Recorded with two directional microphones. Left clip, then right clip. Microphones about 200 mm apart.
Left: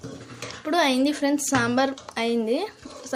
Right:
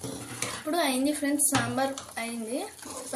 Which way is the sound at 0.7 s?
40° left (ahead or behind).